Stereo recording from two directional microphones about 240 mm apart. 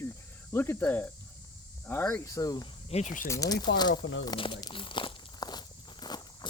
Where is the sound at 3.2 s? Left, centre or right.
Centre.